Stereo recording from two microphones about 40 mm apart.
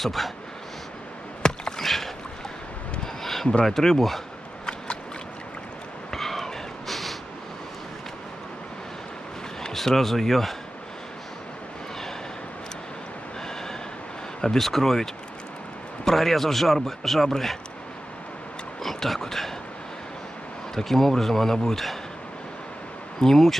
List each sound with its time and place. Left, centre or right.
0.0 s a man's voice: centre
1.4 s chop: centre
1.8 s boat: centre
3.6 s speech: centre
6.1 s snort: centre
9.6 s a man's voice: centre
14.4 s speech: centre
16.1 s a man's voice: centre
18.8 s a sound: centre
20.7 s speech: centre
23.2 s speech: centre